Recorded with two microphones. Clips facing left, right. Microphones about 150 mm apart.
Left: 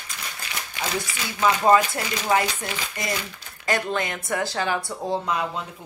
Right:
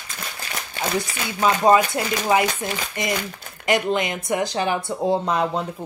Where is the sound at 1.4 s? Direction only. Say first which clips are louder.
Right 2 dB; 20° right (ahead or behind).